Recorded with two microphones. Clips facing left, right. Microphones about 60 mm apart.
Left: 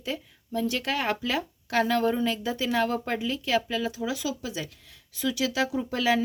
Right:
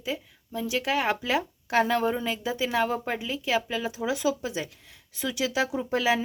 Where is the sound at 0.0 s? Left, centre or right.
Centre.